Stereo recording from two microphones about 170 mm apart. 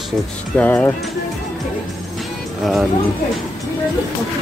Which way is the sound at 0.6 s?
10° left (ahead or behind).